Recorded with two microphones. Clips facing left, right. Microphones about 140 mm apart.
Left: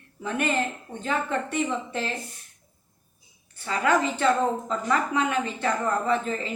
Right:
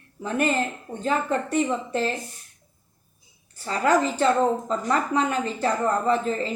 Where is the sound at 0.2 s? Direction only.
35° right (ahead or behind).